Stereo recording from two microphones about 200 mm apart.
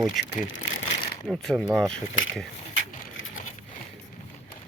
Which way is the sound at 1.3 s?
Centre (ahead or behind).